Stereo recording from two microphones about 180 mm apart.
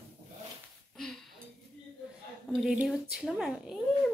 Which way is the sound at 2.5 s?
5° right (ahead or behind).